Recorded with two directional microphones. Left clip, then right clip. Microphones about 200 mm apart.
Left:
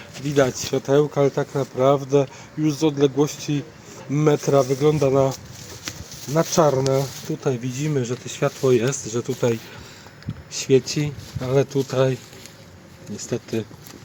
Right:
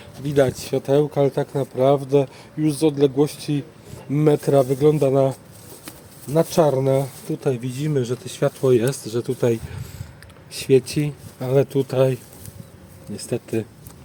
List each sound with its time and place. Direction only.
0.3 s speech: 15° right (ahead or behind)
6.3 s speech: 10° right (ahead or behind)